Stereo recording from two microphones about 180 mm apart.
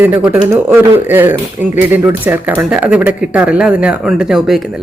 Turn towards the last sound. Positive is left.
turn(degrees=0)  # may be behind; listen again after turning